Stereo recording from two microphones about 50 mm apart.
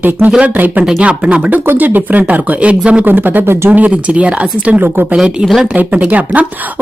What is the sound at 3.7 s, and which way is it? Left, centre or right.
Speech, right.